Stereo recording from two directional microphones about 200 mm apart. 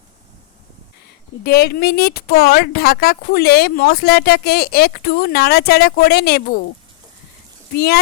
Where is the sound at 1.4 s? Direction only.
50° left (ahead or behind).